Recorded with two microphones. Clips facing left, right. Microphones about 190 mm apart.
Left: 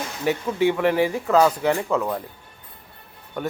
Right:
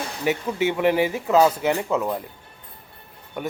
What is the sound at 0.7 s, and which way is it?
Speech, 15° right (ahead or behind).